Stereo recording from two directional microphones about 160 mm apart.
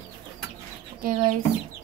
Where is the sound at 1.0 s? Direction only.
60° right (ahead or behind).